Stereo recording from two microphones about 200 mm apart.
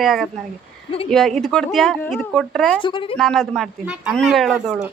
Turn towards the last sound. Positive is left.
turn(degrees=-5)  # may be behind; listen again after turning